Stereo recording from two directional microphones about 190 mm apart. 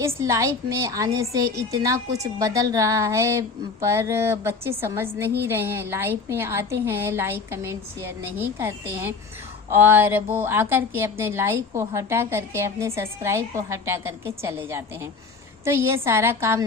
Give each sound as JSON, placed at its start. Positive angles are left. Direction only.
{"t": 0.0, "sound": "a woman's voice", "side_deg": -15}
{"t": 15.6, "sound": "a woman's voice", "side_deg": -15}